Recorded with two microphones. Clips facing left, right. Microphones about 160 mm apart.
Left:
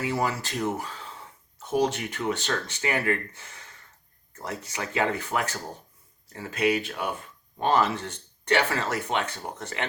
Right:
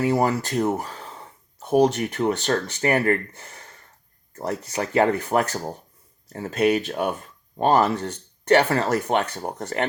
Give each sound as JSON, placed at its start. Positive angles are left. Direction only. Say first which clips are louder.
{"t": 0.1, "sound": "speech", "louder": "right 7 dB", "side_deg": -40}